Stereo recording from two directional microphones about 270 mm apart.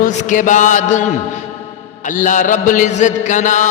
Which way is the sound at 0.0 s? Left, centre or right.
Left.